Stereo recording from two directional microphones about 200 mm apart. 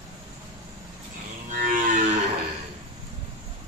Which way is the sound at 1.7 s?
40° right (ahead or behind).